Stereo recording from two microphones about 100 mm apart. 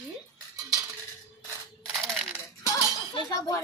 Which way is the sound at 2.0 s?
Centre (ahead or behind).